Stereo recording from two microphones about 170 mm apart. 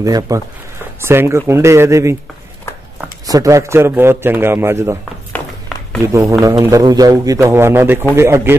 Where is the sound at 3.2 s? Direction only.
20° right (ahead or behind).